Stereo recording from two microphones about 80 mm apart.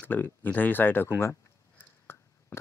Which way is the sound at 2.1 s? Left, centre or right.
Left.